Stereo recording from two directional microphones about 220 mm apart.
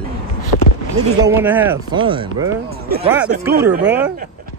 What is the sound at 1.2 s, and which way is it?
Speech, 10° right (ahead or behind).